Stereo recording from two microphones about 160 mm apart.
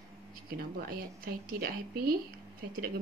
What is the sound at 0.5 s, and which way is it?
Speech, 65° right (ahead or behind).